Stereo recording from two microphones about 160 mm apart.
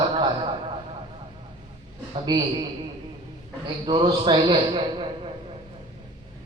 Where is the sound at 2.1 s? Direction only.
30° right (ahead or behind).